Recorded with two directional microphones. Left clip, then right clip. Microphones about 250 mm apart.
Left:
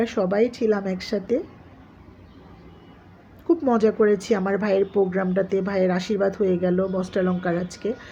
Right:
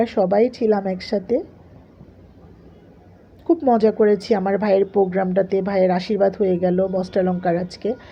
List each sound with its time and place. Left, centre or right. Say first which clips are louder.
0.0 s speech: right 4 dB; centre
3.4 s speech: right 3 dB; centre